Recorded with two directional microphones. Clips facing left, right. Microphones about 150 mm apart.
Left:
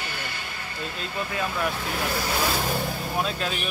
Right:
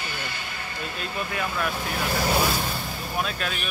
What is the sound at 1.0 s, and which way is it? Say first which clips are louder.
Speech: even; 20° left (ahead or behind).